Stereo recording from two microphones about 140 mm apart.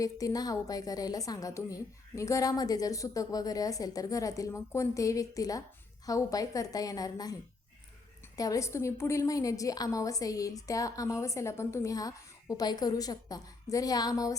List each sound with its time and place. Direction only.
0.0 s a woman's voice: 25° left (ahead or behind)
8.4 s a woman's voice: 25° left (ahead or behind)